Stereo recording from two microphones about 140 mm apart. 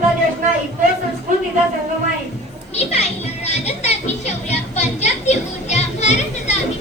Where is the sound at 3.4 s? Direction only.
50° left (ahead or behind).